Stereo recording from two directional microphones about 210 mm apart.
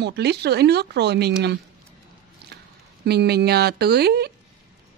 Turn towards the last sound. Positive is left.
turn(degrees=-50)  # may be behind; listen again after turning